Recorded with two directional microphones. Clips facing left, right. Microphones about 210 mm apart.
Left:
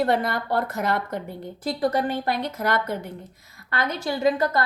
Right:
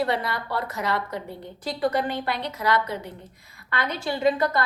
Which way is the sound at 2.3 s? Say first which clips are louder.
Left 1 dB; 45° left (ahead or behind).